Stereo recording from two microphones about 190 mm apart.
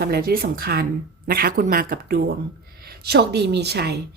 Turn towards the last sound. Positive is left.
turn(degrees=-60)  # may be behind; listen again after turning